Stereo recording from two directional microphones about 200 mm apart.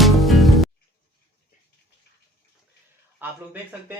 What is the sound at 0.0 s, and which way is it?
Music, centre (ahead or behind).